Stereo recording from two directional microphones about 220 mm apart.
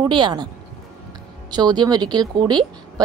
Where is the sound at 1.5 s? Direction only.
20° right (ahead or behind).